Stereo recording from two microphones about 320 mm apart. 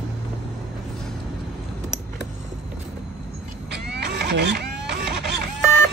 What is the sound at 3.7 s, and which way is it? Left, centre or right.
Printer, right.